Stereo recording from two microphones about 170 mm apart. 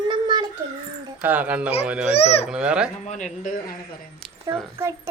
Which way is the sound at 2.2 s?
35° left (ahead or behind).